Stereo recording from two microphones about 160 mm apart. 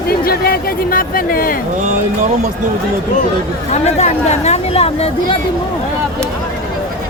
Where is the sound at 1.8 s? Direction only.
50° right (ahead or behind).